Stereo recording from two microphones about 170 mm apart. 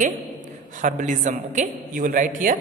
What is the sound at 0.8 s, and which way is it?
A woman's voice, 50° right (ahead or behind).